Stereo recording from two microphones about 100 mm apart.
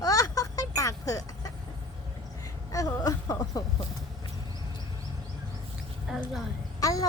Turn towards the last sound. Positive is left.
turn(degrees=35)  # may be behind; listen again after turning